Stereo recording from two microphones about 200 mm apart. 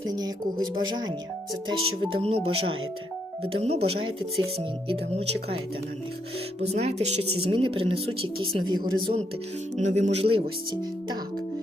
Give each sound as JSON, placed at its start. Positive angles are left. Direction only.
{"t": 0.1, "sound": "a woman's voice", "side_deg": -20}
{"t": 2.4, "sound": "speech", "side_deg": -90}
{"t": 3.4, "sound": "a woman's voice", "side_deg": -30}
{"t": 6.6, "sound": "a woman's voice", "side_deg": -30}
{"t": 9.7, "sound": "speech", "side_deg": -35}